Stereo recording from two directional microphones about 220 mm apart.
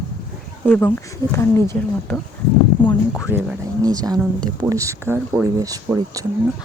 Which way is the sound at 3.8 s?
15° right (ahead or behind).